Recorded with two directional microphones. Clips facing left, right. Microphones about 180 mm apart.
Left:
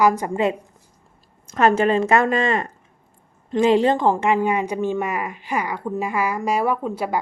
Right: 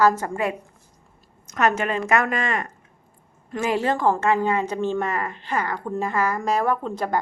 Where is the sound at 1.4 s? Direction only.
30° left (ahead or behind).